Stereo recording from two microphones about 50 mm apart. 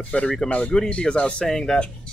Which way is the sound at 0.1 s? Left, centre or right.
Left.